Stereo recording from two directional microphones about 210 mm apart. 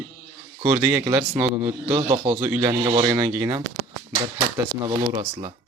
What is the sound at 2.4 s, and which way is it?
Speech, 10° right (ahead or behind).